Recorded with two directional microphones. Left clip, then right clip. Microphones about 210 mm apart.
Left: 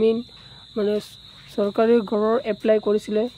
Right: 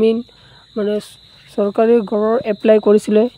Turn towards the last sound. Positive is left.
turn(degrees=-35)  # may be behind; listen again after turning